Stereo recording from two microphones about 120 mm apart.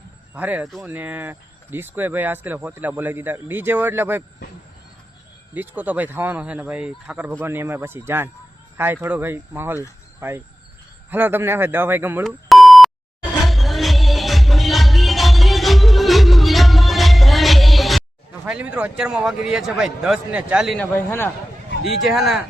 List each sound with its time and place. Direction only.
0.3 s speech: 15° right (ahead or behind)
5.5 s speech: 15° right (ahead or behind)
12.2 s beep: centre (ahead or behind)
13.4 s music: centre (ahead or behind)
18.4 s a man's voice: 10° right (ahead or behind)
21.8 s a man's voice: centre (ahead or behind)